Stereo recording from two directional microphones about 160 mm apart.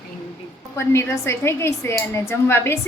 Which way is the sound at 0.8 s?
15° left (ahead or behind).